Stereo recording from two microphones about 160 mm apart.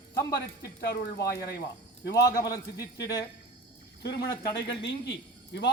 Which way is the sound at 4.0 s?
90° left.